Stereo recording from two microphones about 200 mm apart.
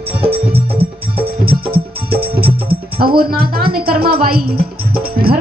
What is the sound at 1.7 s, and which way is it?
Music, 50° right (ahead or behind).